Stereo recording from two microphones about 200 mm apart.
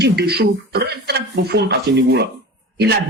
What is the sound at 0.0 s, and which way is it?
Speech, 55° right (ahead or behind).